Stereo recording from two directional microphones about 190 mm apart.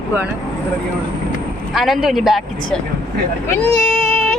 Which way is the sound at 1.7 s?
Centre (ahead or behind).